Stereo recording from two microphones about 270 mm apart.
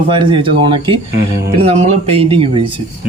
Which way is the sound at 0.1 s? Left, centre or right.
Centre.